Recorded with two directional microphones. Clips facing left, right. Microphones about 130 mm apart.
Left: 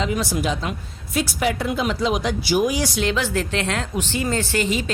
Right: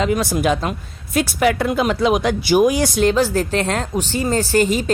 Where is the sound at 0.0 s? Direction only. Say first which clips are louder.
Right 5 dB; 55° right (ahead or behind).